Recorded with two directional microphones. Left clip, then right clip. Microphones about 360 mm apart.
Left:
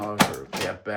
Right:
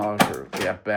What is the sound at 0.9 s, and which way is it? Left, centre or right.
Speech, centre.